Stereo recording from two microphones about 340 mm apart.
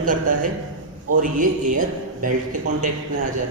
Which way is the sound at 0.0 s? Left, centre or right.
Right.